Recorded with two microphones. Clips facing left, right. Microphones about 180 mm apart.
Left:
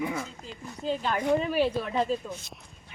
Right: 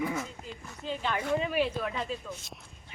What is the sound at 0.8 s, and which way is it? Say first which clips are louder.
Speech: left 4 dB; 35° left (ahead or behind).